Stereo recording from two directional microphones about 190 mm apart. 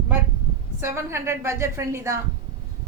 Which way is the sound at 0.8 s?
15° right (ahead or behind).